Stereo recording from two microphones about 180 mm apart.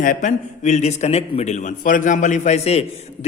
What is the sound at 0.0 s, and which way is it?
A man's voice, 45° left (ahead or behind).